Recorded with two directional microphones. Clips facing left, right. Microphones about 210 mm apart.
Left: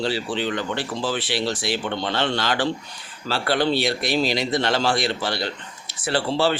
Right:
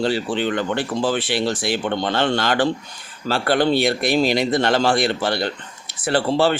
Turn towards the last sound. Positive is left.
turn(degrees=-55)  # may be behind; listen again after turning